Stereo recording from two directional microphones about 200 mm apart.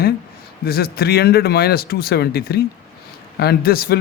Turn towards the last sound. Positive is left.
turn(degrees=50)  # may be behind; listen again after turning